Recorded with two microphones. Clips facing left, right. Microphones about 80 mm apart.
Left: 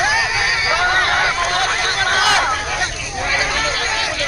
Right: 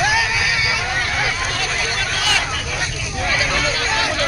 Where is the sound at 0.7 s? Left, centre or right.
Left.